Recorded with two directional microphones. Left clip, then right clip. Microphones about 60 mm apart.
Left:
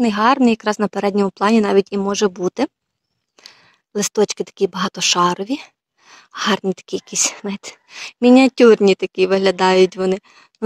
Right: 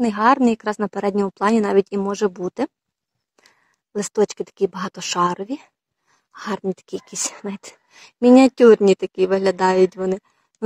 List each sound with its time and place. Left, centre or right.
0.0 s speech: left